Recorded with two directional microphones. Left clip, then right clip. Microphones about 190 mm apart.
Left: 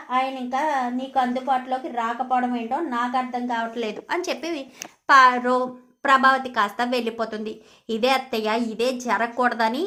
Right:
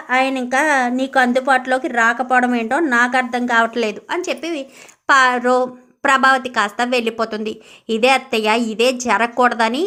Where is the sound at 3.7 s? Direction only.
20° right (ahead or behind).